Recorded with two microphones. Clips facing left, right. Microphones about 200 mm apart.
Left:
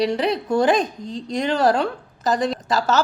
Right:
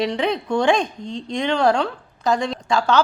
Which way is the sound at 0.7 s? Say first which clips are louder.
Even; 40° left (ahead or behind).